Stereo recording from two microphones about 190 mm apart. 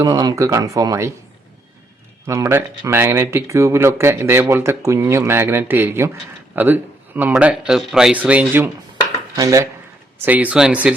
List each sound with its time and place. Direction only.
0.0 s speech: 20° right (ahead or behind)
2.2 s speech: 15° right (ahead or behind)